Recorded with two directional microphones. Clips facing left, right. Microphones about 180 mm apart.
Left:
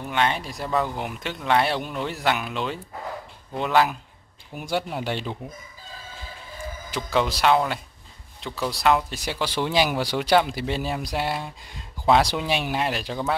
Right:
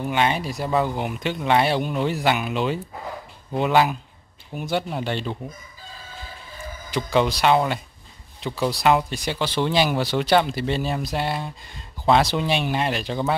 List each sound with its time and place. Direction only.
0.0 s speech: 5° right (ahead or behind); by 5.4 s 10° left (ahead or behind)
6.6 s speech: 5° left (ahead or behind)